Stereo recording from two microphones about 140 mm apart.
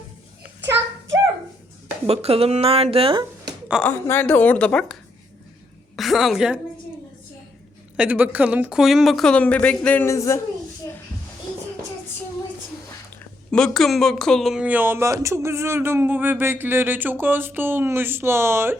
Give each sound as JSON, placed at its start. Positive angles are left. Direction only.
{"t": 2.0, "sound": "speech", "side_deg": -45}
{"t": 3.8, "sound": "a woman's voice", "side_deg": 15}
{"t": 6.0, "sound": "a woman's voice", "side_deg": 0}
{"t": 7.9, "sound": "speech", "side_deg": -10}
{"t": 13.5, "sound": "speech", "side_deg": 5}